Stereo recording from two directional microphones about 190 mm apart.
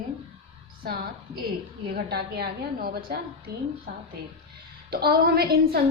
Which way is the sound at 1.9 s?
55° right (ahead or behind).